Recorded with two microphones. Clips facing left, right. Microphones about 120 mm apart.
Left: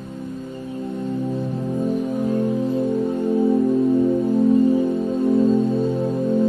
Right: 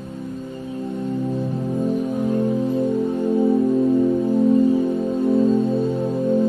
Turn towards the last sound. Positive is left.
turn(degrees=-10)  # may be behind; listen again after turning